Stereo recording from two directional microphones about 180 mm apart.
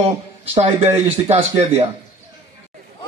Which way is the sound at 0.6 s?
35° right (ahead or behind).